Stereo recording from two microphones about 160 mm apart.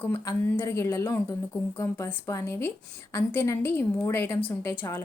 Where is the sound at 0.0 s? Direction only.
15° left (ahead or behind).